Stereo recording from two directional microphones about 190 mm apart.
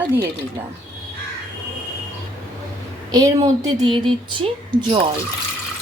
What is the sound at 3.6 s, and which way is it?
Speech, 25° right (ahead or behind).